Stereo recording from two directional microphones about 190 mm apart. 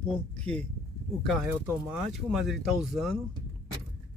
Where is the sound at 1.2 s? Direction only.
Centre (ahead or behind).